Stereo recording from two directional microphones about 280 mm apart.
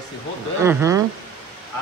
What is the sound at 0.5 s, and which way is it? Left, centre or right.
Speech, centre.